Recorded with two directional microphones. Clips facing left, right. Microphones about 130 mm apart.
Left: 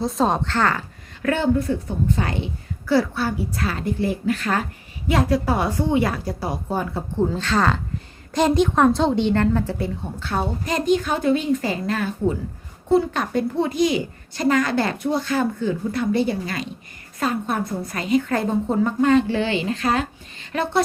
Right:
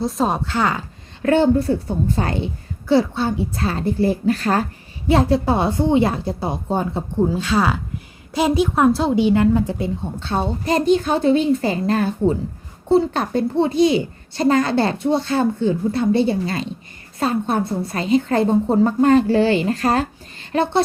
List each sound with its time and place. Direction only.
0.0 s a woman's voice: centre (ahead or behind)
1.2 s a woman's voice: 30° right (ahead or behind)
2.8 s a child's voice: 25° right (ahead or behind)
7.2 s a woman's voice: 10° right (ahead or behind); by 20.1 s 40° right (ahead or behind)
20.5 s a child's voice: 30° right (ahead or behind)